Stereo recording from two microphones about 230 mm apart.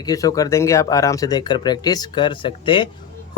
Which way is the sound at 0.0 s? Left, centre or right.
Centre.